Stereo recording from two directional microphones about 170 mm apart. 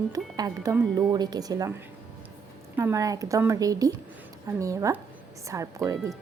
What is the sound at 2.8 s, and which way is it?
A woman's voice, 20° right (ahead or behind).